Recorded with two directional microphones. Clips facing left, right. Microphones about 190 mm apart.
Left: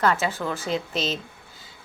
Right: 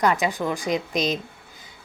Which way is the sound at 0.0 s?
15° right (ahead or behind).